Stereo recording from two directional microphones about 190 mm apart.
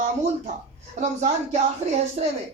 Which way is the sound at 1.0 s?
40° right (ahead or behind).